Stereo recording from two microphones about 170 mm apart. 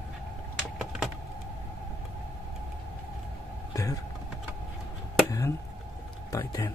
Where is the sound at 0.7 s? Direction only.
5° right (ahead or behind).